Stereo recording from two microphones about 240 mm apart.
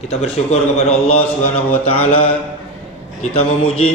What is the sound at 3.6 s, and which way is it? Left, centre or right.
Mantra, left.